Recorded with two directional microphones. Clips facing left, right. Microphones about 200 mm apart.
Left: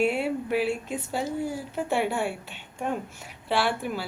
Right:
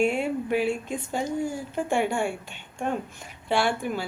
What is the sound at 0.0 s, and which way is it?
A woman's voice, 5° left (ahead or behind).